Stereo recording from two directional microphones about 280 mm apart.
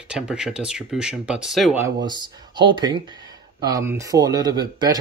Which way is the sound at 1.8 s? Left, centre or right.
Centre.